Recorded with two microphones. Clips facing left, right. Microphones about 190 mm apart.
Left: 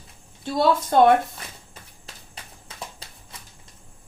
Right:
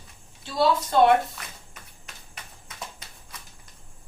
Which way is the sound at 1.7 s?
30° left (ahead or behind).